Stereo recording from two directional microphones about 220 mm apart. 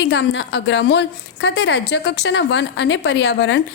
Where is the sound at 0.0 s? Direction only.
50° left (ahead or behind).